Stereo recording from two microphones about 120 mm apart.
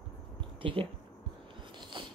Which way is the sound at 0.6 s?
45° right (ahead or behind).